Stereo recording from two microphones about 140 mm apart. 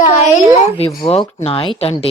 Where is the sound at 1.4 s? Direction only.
40° left (ahead or behind).